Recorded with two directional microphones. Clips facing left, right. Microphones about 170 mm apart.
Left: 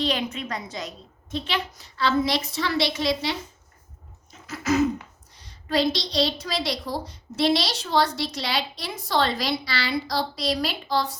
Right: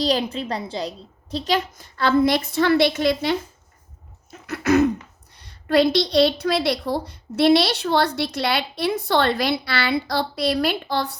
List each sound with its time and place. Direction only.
0.0 s a woman's voice: 35° right (ahead or behind); by 11.2 s 60° right (ahead or behind)